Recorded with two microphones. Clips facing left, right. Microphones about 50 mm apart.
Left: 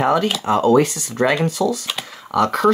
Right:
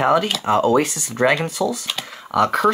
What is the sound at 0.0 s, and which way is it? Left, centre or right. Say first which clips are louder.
Speech: even; centre.